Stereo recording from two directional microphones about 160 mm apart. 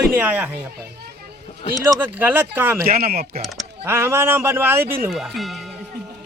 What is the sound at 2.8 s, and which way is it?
Speech, 70° right (ahead or behind).